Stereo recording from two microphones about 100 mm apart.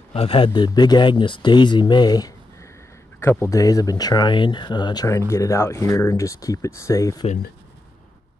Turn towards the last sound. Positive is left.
turn(degrees=30)  # may be behind; listen again after turning